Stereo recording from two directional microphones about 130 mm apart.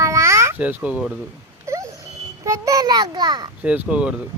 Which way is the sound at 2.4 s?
25° right (ahead or behind).